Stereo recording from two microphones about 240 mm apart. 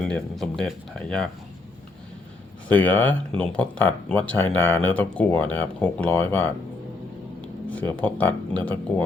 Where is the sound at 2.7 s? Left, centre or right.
Centre.